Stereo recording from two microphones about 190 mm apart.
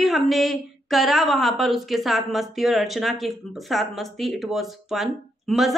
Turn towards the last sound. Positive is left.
turn(degrees=0)  # may be behind; listen again after turning